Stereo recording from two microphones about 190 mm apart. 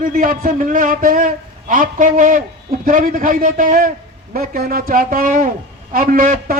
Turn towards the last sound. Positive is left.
turn(degrees=-45)  # may be behind; listen again after turning